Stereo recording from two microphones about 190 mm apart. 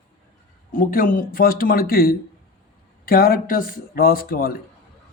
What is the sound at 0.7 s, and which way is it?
Speech, 45° left (ahead or behind).